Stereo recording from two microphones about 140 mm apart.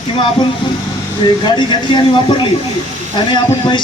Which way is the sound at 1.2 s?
35° left (ahead or behind).